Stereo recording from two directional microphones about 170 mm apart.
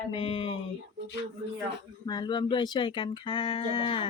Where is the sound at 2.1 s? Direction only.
25° left (ahead or behind).